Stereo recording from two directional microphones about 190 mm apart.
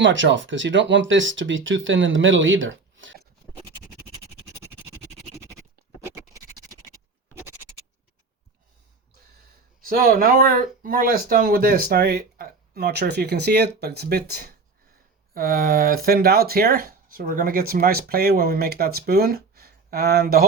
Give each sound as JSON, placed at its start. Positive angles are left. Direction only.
{"t": 0.0, "sound": "speech", "side_deg": -75}
{"t": 6.3, "sound": "scratch", "side_deg": -20}
{"t": 9.8, "sound": "speech", "side_deg": -50}